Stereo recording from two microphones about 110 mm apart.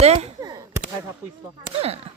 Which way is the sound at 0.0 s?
70° right (ahead or behind).